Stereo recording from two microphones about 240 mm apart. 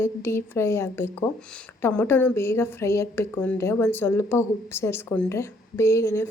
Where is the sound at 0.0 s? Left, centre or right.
Centre.